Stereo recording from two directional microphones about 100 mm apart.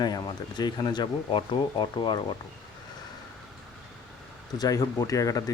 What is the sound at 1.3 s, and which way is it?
Speech, 55° left (ahead or behind).